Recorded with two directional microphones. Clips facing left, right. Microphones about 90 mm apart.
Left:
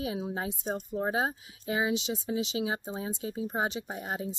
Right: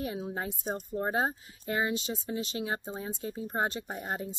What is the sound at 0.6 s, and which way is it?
Speech, 5° right (ahead or behind).